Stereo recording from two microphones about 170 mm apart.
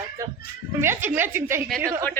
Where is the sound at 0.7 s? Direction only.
15° right (ahead or behind).